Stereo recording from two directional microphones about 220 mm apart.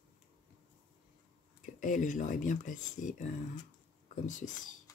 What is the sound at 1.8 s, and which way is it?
Speech, 35° left (ahead or behind).